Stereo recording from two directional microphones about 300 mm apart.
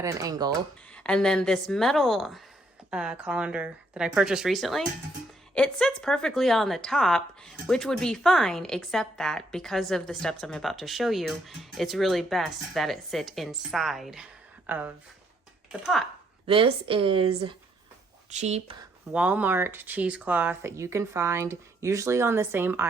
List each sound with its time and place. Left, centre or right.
0.0 s speech: centre
0.9 s speech: centre
16.5 s speech: centre
19.1 s speech: centre